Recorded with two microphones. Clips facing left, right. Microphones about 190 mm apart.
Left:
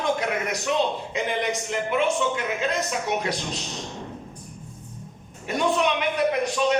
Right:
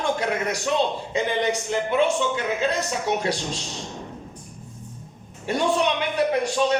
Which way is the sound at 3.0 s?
30° right (ahead or behind).